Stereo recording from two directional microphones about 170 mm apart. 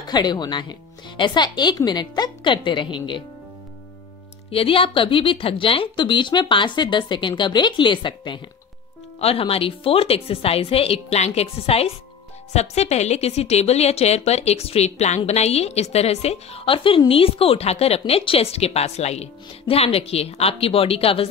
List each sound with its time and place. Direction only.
0.0 s speech: 25° left (ahead or behind)
4.5 s speech: 35° left (ahead or behind)